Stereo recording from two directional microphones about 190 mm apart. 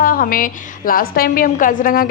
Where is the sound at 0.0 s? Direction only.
50° left (ahead or behind).